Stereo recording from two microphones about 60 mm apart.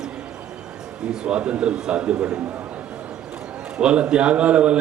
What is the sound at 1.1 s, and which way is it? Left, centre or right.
A man's voice, centre.